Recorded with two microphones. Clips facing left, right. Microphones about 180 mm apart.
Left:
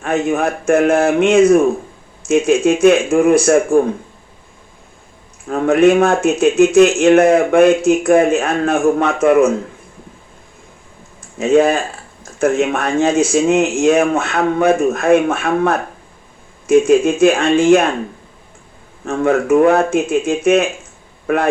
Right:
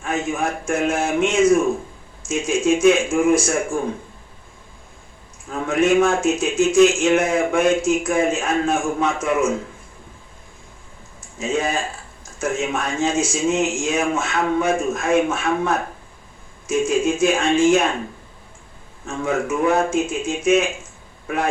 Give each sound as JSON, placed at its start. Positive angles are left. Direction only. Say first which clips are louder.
{"t": 0.0, "sound": "speech", "louder": "left 7 dB", "side_deg": 65}
{"t": 5.5, "sound": "speech", "louder": "left 7 dB", "side_deg": 60}
{"t": 11.3, "sound": "speech", "louder": "left 10 dB", "side_deg": 60}
{"t": 19.0, "sound": "a man's voice", "louder": "left 8 dB", "side_deg": 60}